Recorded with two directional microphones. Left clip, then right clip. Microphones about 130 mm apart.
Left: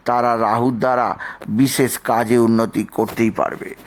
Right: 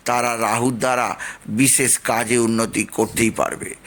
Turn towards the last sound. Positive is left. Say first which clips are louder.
# left 1 dB
turn(degrees=10)  # may be behind; listen again after turning